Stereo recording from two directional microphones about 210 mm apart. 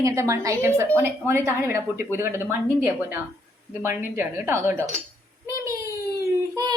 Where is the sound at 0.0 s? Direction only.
15° right (ahead or behind).